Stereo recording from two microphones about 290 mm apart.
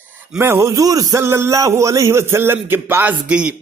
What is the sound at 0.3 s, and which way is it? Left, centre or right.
A man's voice, centre.